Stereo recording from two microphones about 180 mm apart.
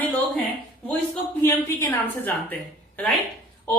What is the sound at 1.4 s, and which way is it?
Speech, 15° left (ahead or behind).